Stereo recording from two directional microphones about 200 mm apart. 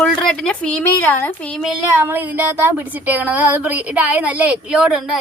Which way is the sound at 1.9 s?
10° right (ahead or behind).